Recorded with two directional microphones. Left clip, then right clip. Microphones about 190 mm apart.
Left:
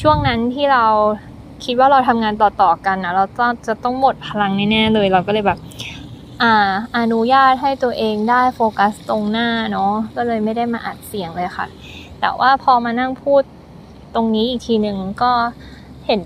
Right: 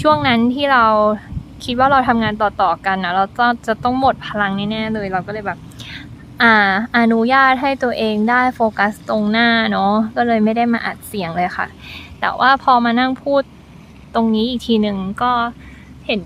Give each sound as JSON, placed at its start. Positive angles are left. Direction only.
{"t": 0.5, "sound": "a woman's voice", "side_deg": -10}
{"t": 6.3, "sound": "a woman's voice", "side_deg": -5}
{"t": 9.8, "sound": "a woman's voice", "side_deg": -20}
{"t": 14.3, "sound": "speech", "side_deg": -5}
{"t": 15.2, "sound": "speech", "side_deg": -30}